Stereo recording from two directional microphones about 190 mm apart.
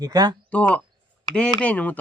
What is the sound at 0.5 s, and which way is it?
Speech, 5° left (ahead or behind).